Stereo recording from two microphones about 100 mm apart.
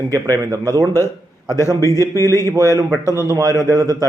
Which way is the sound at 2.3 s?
35° right (ahead or behind).